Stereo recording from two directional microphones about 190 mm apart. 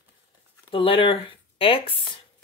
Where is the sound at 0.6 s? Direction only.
25° left (ahead or behind).